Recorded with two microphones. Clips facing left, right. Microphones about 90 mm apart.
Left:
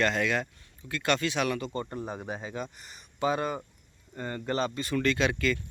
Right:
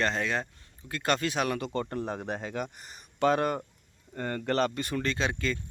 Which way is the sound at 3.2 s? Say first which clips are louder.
Right 3 dB; 75° right (ahead or behind).